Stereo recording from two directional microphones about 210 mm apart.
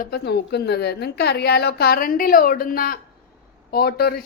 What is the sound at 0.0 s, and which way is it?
A woman's voice, 50° left (ahead or behind).